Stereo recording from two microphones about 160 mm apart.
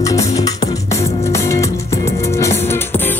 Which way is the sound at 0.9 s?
40° left (ahead or behind).